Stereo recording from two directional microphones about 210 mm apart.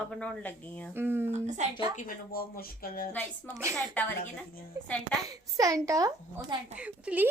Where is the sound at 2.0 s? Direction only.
45° left (ahead or behind).